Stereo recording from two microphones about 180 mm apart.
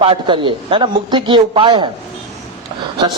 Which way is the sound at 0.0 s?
30° right (ahead or behind).